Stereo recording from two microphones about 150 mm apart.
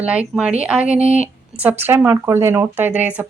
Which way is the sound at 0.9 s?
45° right (ahead or behind).